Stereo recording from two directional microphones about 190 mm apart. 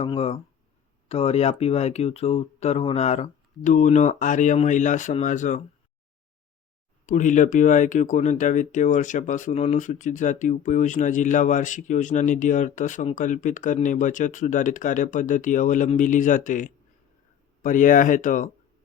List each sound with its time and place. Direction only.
0.0 s speech: 30° left (ahead or behind)
7.0 s speech: 40° left (ahead or behind)